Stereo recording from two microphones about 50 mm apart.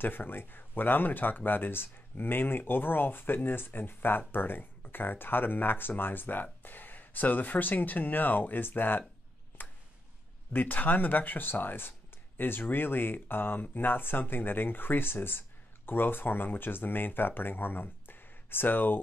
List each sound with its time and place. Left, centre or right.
0.0 s speech: left
9.6 s a sound: left
10.5 s speech: left